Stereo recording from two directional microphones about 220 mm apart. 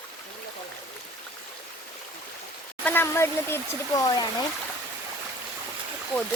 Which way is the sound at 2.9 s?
10° left (ahead or behind).